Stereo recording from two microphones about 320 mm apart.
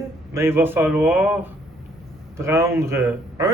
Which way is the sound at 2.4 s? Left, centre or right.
Centre.